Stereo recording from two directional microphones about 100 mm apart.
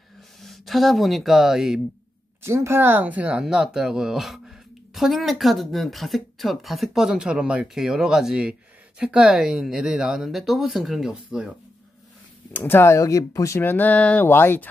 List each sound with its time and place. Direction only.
0.4 s speech: centre (ahead or behind)
2.4 s speech: 25° right (ahead or behind); by 11.4 s 5° right (ahead or behind)
12.5 s speech: 25° left (ahead or behind)